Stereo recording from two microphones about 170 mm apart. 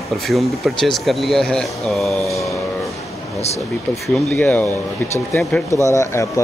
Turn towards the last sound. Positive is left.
turn(degrees=20)  # may be behind; listen again after turning